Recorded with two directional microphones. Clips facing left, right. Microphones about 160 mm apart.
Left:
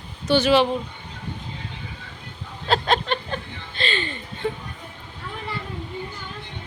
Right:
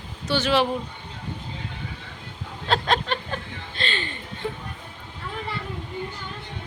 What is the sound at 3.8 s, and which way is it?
Speech, centre (ahead or behind).